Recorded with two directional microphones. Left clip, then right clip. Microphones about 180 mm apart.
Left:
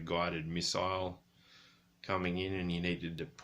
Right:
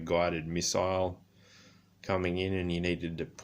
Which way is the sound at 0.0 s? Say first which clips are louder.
Right 6 dB; 40° right (ahead or behind).